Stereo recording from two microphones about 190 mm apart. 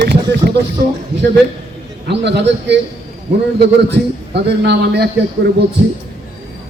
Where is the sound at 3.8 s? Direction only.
60° right (ahead or behind).